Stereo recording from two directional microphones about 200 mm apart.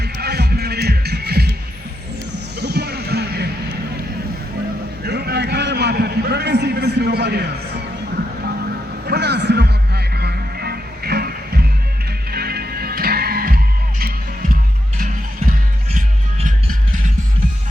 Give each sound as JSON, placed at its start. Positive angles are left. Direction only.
{"t": 0.0, "sound": "music", "side_deg": -55}
{"t": 2.6, "sound": "music", "side_deg": -55}
{"t": 5.0, "sound": "a sound", "side_deg": -55}
{"t": 9.0, "sound": "music", "side_deg": -55}